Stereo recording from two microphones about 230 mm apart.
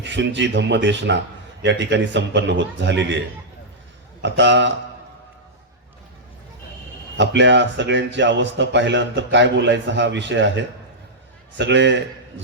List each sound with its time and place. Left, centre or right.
0.0 s a man's voice: right
7.2 s a man's voice: right